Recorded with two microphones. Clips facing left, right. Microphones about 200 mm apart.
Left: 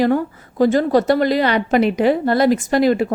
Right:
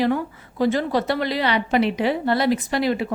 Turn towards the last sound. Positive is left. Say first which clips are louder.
# left 7 dB
turn(degrees=45)  # may be behind; listen again after turning